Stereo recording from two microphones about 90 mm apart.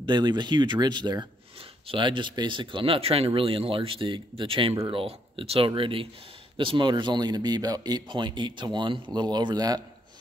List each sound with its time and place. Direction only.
0.0 s speech: 55° right (ahead or behind); by 4.7 s 80° right
4.9 s speech: 90° right; by 9.8 s 50° right (ahead or behind)